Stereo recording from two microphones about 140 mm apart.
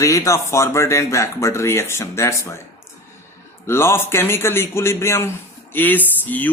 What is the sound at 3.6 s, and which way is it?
A man's voice, 20° left (ahead or behind).